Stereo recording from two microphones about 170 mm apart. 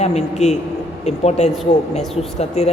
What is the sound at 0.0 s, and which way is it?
A woman's voice, 40° left (ahead or behind).